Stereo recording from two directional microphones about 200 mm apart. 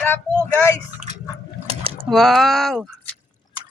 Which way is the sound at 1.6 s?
30° right (ahead or behind).